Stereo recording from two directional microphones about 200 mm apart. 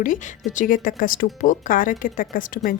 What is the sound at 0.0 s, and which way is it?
A woman's voice, 40° left (ahead or behind).